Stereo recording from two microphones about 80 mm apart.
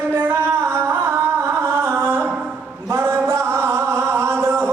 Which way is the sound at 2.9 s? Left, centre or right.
Right.